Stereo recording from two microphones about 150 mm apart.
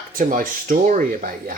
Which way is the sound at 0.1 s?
65° right (ahead or behind).